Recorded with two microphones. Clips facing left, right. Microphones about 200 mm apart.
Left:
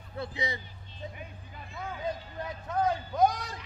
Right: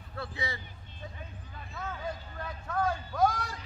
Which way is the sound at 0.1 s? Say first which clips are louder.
Left 3 dB; 20° left (ahead or behind).